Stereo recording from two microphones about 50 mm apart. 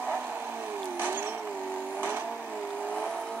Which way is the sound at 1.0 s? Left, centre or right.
Right.